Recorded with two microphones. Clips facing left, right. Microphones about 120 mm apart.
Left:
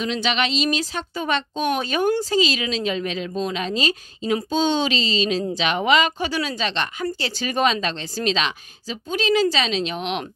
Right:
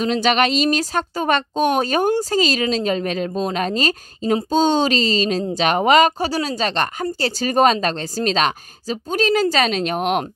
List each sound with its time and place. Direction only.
0.0 s a woman's voice: 45° right (ahead or behind)